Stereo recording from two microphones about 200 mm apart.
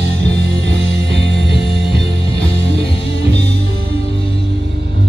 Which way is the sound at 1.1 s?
60° right (ahead or behind).